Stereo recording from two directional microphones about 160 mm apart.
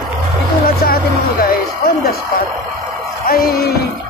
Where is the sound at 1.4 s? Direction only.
70° left (ahead or behind).